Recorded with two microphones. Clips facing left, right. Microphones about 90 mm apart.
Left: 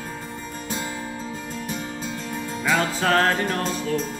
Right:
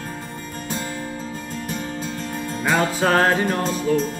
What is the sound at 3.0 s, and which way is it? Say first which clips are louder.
Music: right 3 dB; 15° right (ahead or behind).